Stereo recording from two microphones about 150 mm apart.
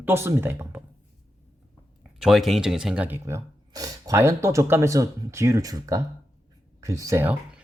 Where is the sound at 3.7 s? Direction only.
25° right (ahead or behind).